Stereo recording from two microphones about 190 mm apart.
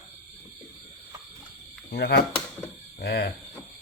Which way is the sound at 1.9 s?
55° left (ahead or behind).